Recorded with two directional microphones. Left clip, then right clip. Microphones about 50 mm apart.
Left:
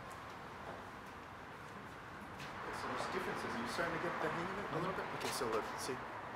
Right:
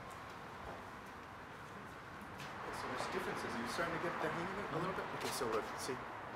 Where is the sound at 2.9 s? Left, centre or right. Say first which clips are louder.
Even; right.